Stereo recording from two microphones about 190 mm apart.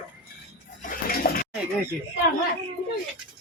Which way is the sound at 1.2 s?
55° left (ahead or behind).